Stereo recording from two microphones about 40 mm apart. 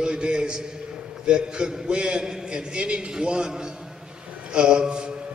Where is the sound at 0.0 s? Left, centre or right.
Right.